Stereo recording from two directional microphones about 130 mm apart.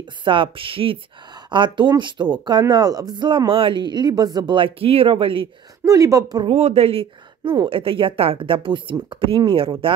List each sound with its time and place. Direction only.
0.0 s speech: 40° right (ahead or behind)
5.9 s a woman's voice: 25° right (ahead or behind)
6.4 s speech: 50° right (ahead or behind)